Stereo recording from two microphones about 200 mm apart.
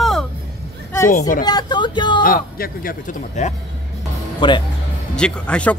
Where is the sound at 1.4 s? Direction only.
20° left (ahead or behind).